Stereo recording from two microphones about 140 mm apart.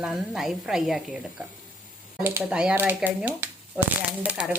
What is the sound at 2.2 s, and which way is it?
Speech, 15° right (ahead or behind).